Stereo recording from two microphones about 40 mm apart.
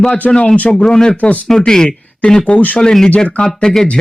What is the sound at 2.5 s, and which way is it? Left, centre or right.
Speech, left.